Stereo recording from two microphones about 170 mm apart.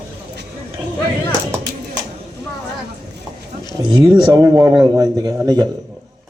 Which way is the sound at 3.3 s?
25° right (ahead or behind).